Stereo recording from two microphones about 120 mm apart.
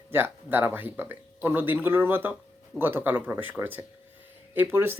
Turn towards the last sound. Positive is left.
turn(degrees=-20)  # may be behind; listen again after turning